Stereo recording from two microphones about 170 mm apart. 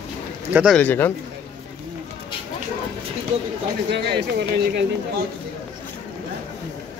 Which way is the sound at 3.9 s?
90° right.